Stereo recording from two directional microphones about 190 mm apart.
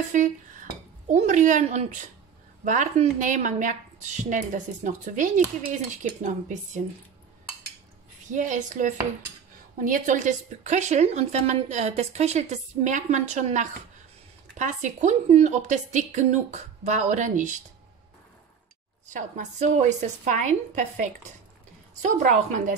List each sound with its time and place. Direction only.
0.1 s a woman's voice: 40° right (ahead or behind)
8.3 s a woman's voice: 40° right (ahead or behind)
19.0 s a woman's voice: 40° right (ahead or behind)